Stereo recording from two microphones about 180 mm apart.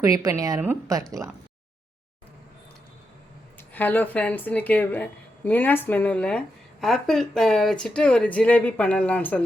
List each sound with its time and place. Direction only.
0.0 s a woman's voice: 20° right (ahead or behind)
3.8 s speech: 10° left (ahead or behind)